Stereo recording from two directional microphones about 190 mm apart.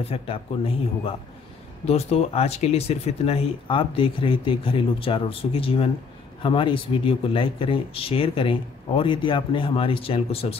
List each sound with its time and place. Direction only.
0.1 s speech: 30° left (ahead or behind)